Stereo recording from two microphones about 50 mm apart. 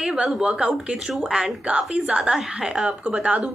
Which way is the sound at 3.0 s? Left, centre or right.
Right.